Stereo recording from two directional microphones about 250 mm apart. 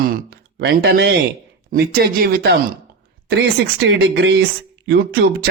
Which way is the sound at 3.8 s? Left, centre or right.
Right.